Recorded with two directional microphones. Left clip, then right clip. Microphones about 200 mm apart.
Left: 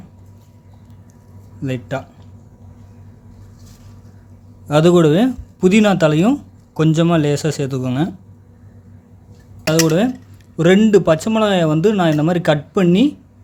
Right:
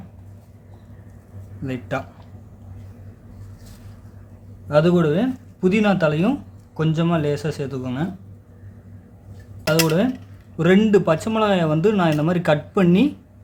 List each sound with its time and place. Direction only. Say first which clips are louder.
1.9 s speech: even; 20° left (ahead or behind)
4.7 s speech: left 5 dB; 40° left (ahead or behind)
9.6 s speech: left 4 dB; 30° left (ahead or behind)